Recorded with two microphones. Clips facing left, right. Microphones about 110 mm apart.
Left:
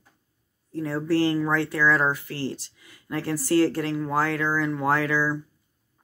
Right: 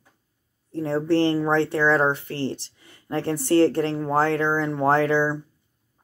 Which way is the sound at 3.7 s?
30° right (ahead or behind).